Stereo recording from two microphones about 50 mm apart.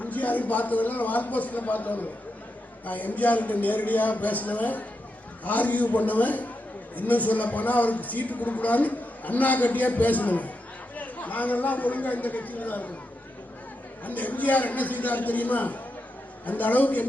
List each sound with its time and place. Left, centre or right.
0.0 s a man's voice: left
14.0 s a man's voice: left